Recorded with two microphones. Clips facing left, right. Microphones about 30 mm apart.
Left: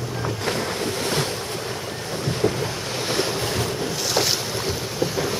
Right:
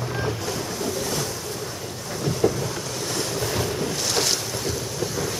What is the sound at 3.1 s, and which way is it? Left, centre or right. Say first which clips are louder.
Waves: left 1 dB; left.